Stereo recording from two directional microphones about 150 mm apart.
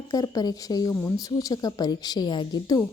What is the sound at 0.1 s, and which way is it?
A woman's voice, 25° left (ahead or behind).